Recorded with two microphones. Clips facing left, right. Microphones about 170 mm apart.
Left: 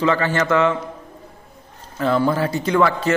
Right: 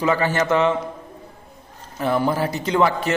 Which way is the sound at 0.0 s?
15° right (ahead or behind).